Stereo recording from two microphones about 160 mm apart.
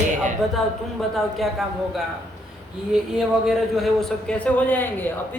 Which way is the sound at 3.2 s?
5° right (ahead or behind).